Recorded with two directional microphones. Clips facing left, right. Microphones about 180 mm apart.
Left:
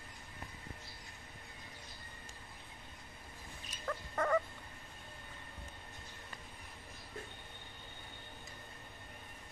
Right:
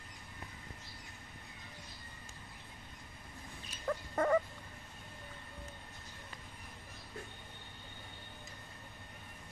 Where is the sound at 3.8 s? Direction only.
15° right (ahead or behind).